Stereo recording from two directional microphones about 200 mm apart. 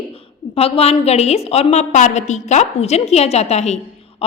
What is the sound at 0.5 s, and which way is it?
A woman's voice, 30° left (ahead or behind).